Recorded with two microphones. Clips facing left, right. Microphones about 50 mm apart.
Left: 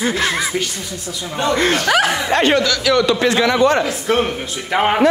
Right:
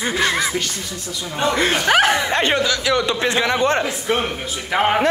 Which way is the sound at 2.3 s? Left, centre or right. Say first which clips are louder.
Left 3 dB; centre.